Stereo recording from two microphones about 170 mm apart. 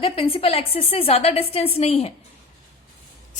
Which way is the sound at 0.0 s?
35° left (ahead or behind).